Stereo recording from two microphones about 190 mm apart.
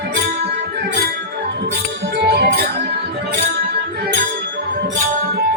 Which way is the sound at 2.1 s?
60° right (ahead or behind).